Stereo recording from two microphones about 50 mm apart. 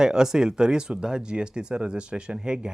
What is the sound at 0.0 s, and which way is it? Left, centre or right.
Speech, centre.